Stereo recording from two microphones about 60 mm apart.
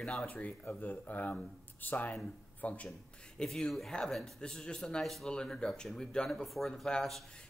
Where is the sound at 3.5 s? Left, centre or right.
Centre.